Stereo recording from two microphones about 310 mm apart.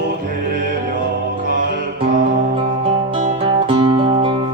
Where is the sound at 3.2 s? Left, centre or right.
Centre.